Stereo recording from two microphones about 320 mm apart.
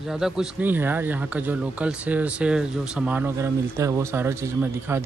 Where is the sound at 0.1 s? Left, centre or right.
Centre.